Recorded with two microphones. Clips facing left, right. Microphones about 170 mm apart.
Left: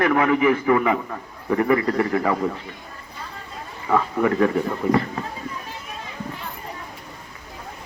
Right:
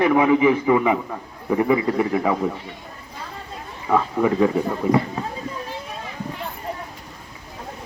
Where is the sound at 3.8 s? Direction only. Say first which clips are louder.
Right 1 dB; 10° right (ahead or behind).